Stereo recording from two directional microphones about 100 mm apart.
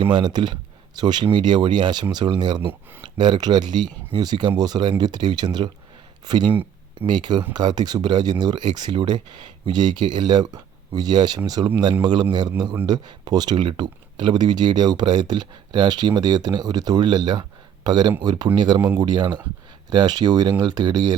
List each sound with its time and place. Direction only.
0.0 s speech: 50° right (ahead or behind)
2.6 s speech: 20° right (ahead or behind)
3.0 s speech: 50° right (ahead or behind)